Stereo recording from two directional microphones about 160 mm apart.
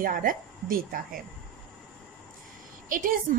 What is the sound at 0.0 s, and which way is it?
A woman's voice, 60° right (ahead or behind).